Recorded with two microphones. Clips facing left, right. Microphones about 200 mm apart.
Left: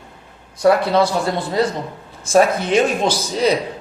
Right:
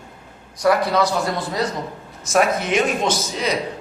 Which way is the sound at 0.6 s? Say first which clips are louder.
Left 3 dB; 25° left (ahead or behind).